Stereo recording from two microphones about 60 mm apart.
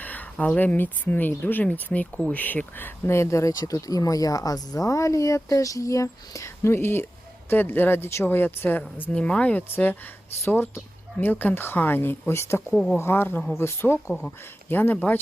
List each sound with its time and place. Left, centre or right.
0.0 s speech: left
3.1 s speech: left
9.1 s speech: left
12.7 s speech: centre
13.0 s speech: left
14.7 s speech: left